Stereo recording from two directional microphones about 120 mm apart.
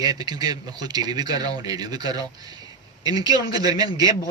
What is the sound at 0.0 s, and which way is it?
Speech, 35° right (ahead or behind).